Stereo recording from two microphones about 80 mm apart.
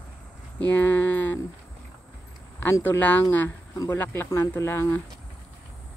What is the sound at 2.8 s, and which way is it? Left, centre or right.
Speech, left.